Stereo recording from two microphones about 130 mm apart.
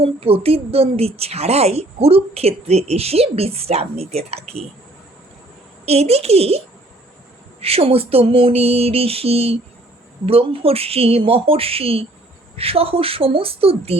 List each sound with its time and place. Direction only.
0.0 s a woman's voice: 50° right (ahead or behind)
5.8 s a woman's voice: 55° right (ahead or behind)
7.6 s a woman's voice: 50° right (ahead or behind)